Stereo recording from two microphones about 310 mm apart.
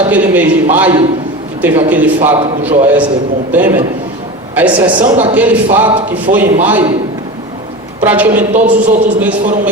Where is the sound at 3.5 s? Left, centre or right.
Centre.